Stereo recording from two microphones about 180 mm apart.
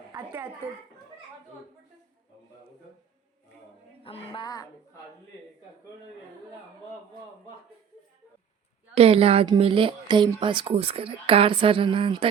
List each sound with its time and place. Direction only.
0.1 s speech: 15° right (ahead or behind)
4.0 s a woman's voice: 30° left (ahead or behind)
9.0 s speech: 35° right (ahead or behind)